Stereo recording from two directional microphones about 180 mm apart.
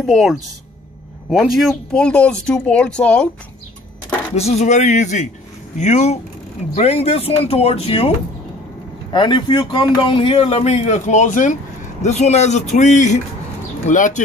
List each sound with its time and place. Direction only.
0.0 s speech: centre (ahead or behind)
4.4 s speech: 35° left (ahead or behind)
9.1 s a man's voice: 25° left (ahead or behind); by 14.2 s 45° left (ahead or behind)